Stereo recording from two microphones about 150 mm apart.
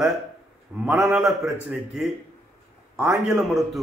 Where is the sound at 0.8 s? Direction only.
15° right (ahead or behind).